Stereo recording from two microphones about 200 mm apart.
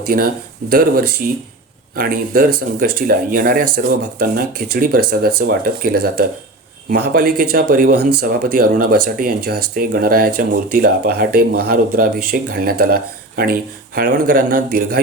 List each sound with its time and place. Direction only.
0.1 s speech: 45° right (ahead or behind)